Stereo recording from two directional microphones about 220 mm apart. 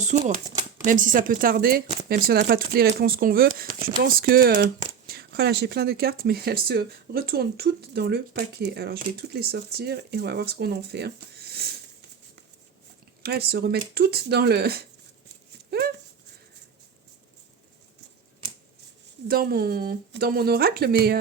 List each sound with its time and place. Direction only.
0.0 s speech: 30° right (ahead or behind)
13.2 s speech: 45° right (ahead or behind)
15.7 s dog: 45° right (ahead or behind)
19.3 s speech: 45° right (ahead or behind)